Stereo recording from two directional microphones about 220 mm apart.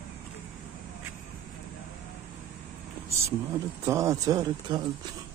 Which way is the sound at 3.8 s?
15° right (ahead or behind).